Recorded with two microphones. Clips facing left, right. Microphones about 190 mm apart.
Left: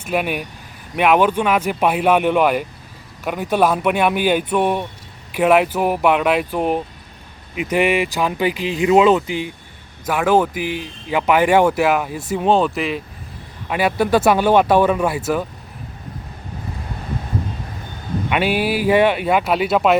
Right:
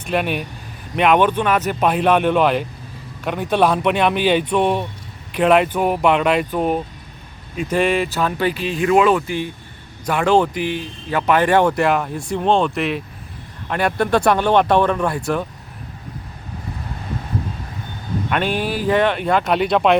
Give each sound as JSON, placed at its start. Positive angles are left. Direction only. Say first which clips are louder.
{"t": 0.0, "sound": "speech", "louder": "even", "side_deg": 5}
{"t": 18.3, "sound": "speech", "louder": "left 3 dB", "side_deg": 5}